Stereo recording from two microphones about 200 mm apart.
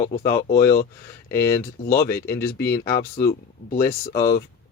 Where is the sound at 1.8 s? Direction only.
50° left (ahead or behind).